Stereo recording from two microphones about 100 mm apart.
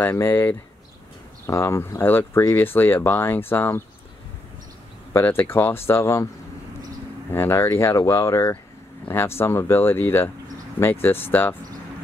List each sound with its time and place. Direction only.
0.0 s speech: 25° left (ahead or behind)
5.1 s speech: 20° left (ahead or behind)
7.2 s speech: 25° left (ahead or behind)